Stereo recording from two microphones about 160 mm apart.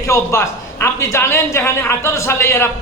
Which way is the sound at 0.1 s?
15° left (ahead or behind).